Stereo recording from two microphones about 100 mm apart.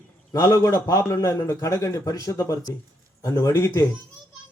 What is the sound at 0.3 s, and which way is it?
Speech, 35° left (ahead or behind).